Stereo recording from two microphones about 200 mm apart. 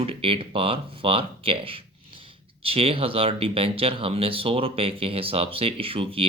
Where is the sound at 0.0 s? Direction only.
30° right (ahead or behind).